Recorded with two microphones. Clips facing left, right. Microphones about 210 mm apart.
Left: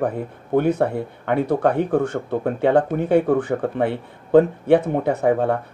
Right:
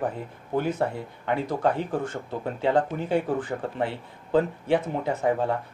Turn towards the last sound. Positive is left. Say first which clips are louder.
# left 6 dB
turn(degrees=60)  # may be behind; listen again after turning